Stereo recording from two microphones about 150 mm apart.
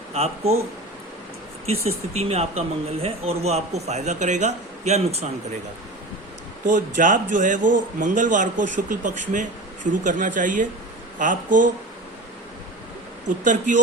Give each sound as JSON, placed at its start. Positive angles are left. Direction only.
{"t": 0.1, "sound": "a man's voice", "side_deg": -45}
{"t": 2.1, "sound": "a man's voice", "side_deg": -45}
{"t": 6.7, "sound": "speech", "side_deg": -60}
{"t": 13.2, "sound": "speech", "side_deg": -55}